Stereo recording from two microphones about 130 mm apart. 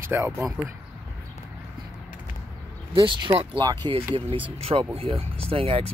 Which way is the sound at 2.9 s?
40° right (ahead or behind).